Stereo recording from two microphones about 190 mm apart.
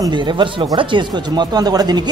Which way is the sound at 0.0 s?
25° right (ahead or behind).